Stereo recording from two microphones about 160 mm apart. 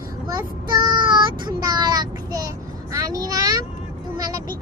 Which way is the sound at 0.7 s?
30° right (ahead or behind).